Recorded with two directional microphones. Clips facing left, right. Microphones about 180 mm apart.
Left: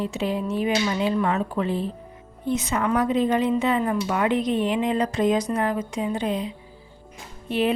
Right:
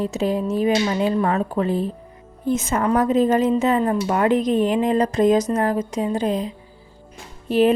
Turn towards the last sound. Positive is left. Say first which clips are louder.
# right 6 dB
turn(degrees=-40)  # may be behind; listen again after turning